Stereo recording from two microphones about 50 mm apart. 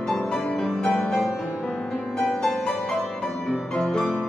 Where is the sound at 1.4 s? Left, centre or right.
Centre.